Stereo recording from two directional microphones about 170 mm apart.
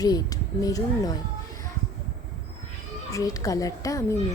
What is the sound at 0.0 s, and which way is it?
Speech, 20° left (ahead or behind).